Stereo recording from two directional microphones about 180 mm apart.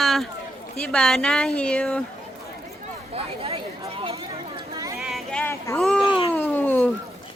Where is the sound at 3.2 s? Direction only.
35° right (ahead or behind).